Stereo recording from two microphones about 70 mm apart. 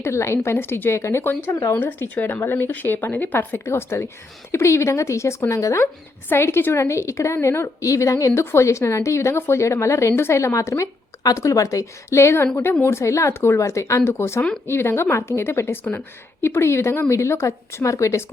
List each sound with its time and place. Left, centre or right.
0.0 s a woman's voice: left
1.5 s speech: left
1.8 s a woman's voice: left